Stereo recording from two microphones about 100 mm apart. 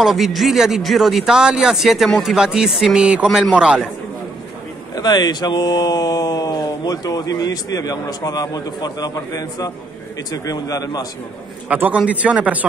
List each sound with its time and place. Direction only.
0.0 s a man's voice: centre (ahead or behind)
4.9 s speech: 45° left (ahead or behind)
11.7 s speech: 15° right (ahead or behind)